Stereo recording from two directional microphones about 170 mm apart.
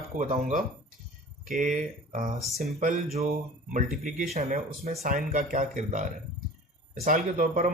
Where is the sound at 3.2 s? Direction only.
45° right (ahead or behind).